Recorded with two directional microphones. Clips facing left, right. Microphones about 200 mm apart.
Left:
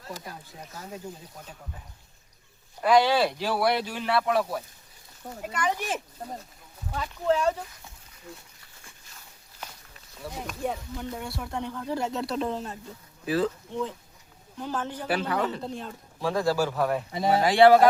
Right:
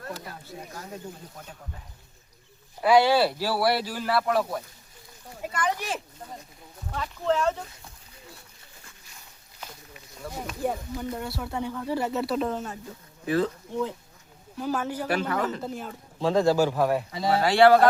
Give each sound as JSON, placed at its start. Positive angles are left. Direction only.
{"t": 2.8, "sound": "speech", "side_deg": -10}
{"t": 6.9, "sound": "speech", "side_deg": 5}
{"t": 10.2, "sound": "speech", "side_deg": -5}
{"t": 13.7, "sound": "speech", "side_deg": -15}
{"t": 15.0, "sound": "speech", "side_deg": 5}
{"t": 16.2, "sound": "speech", "side_deg": -20}
{"t": 17.1, "sound": "speech", "side_deg": 20}